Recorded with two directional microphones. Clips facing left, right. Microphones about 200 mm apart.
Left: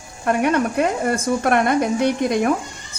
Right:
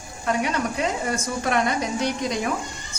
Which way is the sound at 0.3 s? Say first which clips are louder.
Left 6 dB; 55° left (ahead or behind).